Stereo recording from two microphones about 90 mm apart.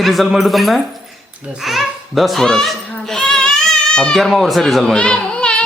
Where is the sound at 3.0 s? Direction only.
5° left (ahead or behind).